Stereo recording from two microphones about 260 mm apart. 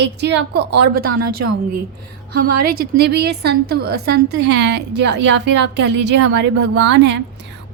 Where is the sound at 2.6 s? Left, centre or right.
Right.